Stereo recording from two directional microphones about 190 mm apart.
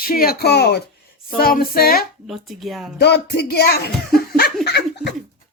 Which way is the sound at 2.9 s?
60° left (ahead or behind).